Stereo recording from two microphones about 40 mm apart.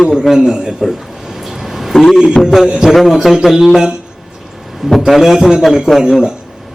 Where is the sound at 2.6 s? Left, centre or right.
Centre.